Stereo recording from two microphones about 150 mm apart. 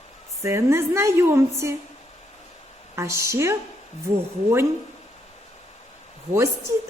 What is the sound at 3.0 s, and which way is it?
Speech, 20° right (ahead or behind).